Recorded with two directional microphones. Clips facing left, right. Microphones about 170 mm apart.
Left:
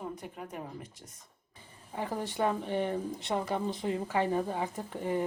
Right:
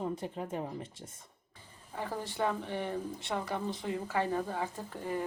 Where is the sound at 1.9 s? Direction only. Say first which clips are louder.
Left 3 dB; 15° left (ahead or behind).